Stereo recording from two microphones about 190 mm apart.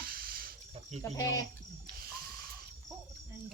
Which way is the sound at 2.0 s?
50° right (ahead or behind).